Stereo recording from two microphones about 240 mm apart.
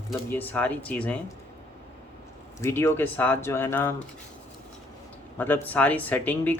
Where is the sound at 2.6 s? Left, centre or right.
Centre.